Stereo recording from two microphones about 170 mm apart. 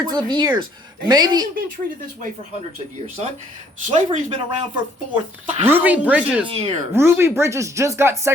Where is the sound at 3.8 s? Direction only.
45° right (ahead or behind).